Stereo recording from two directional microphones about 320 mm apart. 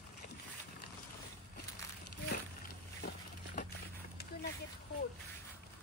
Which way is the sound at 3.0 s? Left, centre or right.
Left.